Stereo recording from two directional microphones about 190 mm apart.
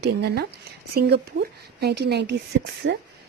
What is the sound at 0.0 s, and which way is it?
A woman's voice, 60° right (ahead or behind).